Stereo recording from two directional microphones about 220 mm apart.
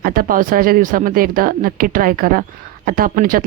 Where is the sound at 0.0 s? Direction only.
40° right (ahead or behind).